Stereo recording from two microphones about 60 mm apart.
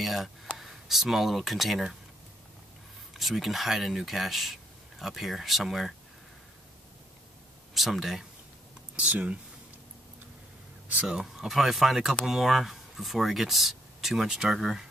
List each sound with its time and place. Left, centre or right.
0.0 s a sound: centre
0.6 s speech: centre
3.2 s speech: centre
7.7 s speech: centre
8.9 s speech: right
11.1 s speech: centre